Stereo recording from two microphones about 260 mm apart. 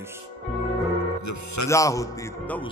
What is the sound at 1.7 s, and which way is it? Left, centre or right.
Speech, centre.